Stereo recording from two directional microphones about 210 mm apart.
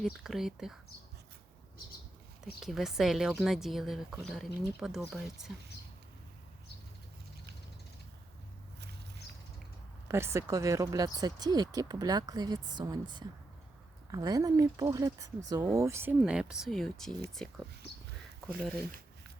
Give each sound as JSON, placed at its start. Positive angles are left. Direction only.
{"t": 0.0, "sound": "speech", "side_deg": 0}
{"t": 2.6, "sound": "speech", "side_deg": 0}
{"t": 10.1, "sound": "speech", "side_deg": -10}